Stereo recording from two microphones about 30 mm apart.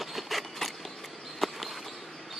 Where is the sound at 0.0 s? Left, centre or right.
Centre.